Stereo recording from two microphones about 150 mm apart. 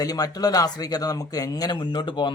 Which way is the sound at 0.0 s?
25° left (ahead or behind).